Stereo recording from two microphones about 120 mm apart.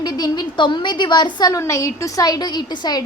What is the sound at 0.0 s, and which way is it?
A woman's voice, 35° left (ahead or behind).